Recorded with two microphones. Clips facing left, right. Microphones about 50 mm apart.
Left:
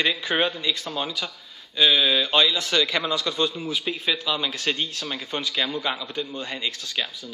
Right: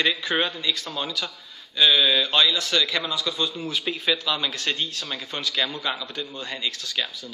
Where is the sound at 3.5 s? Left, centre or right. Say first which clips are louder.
Even; centre.